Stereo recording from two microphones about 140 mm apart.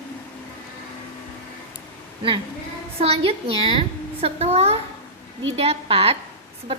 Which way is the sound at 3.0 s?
45° right (ahead or behind).